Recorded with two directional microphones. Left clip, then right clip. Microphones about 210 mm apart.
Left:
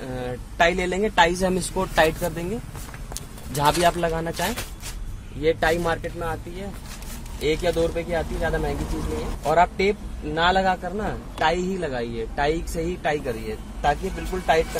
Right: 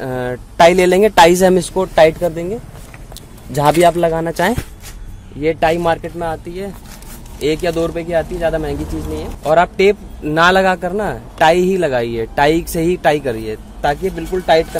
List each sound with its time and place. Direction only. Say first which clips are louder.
0.0 s a man's voice: right 10 dB; 50° right (ahead or behind); by 2.4 s 30° right (ahead or behind)
3.5 s speech: right 8 dB; 35° right (ahead or behind)
7.4 s a man's voice: right 6 dB; 45° right (ahead or behind)